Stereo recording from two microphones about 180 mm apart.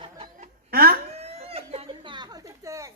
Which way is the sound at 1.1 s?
35° right (ahead or behind).